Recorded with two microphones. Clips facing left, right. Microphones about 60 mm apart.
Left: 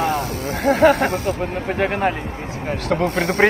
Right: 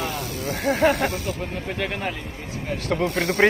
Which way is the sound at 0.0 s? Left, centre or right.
Left.